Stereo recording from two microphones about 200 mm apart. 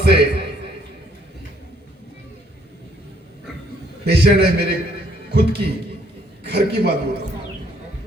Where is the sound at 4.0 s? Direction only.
55° right (ahead or behind).